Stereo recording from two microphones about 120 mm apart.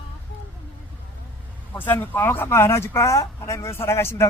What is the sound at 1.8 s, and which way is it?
Speech, 15° left (ahead or behind).